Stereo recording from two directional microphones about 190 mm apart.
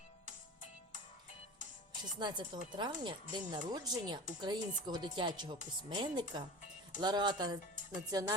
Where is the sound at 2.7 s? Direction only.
25° right (ahead or behind).